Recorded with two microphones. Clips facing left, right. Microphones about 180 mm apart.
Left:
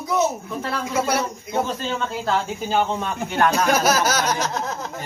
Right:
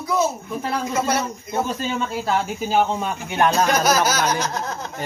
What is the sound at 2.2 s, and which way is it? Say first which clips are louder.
Speech: even; 10° right (ahead or behind).